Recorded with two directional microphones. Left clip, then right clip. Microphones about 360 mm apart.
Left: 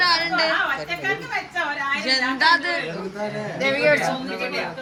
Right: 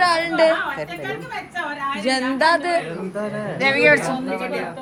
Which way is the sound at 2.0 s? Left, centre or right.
Centre.